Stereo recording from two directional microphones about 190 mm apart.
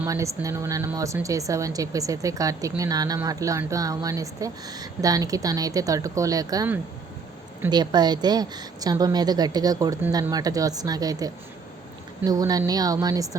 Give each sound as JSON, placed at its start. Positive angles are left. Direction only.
{"t": 0.0, "sound": "speech", "side_deg": -15}
{"t": 7.7, "sound": "a woman's voice", "side_deg": -20}